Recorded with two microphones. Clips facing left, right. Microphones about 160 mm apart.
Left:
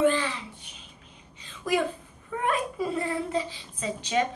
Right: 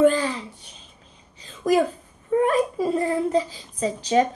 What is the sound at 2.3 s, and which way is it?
A child's voice, 40° right (ahead or behind).